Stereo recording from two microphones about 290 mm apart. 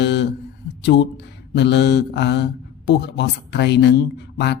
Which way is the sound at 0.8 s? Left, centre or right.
Left.